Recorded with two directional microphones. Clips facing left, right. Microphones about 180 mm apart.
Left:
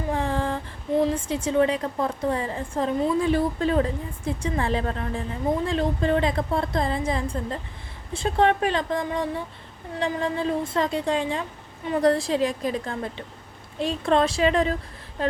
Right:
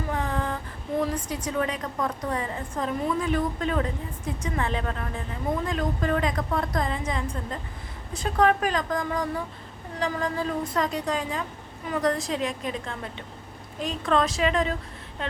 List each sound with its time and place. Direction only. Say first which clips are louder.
0.1 s a woman's voice: left 5 dB; 30° left (ahead or behind)